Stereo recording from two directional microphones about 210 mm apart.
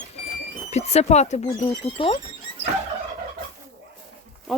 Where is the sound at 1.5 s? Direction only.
20° left (ahead or behind).